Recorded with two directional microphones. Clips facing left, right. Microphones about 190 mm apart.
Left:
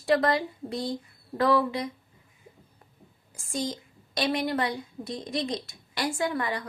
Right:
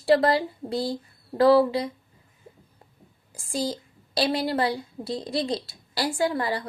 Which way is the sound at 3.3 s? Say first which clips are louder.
Right 3 dB; 30° right (ahead or behind).